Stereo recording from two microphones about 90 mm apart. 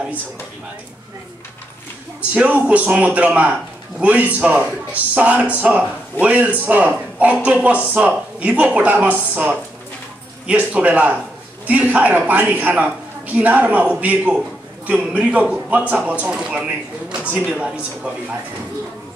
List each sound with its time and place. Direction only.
2.3 s a man's voice: 15° right (ahead or behind)